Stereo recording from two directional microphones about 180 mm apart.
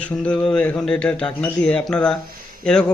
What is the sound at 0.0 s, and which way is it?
A man's voice, 5° left (ahead or behind).